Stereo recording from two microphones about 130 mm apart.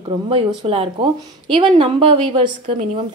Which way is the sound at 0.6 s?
45° right (ahead or behind).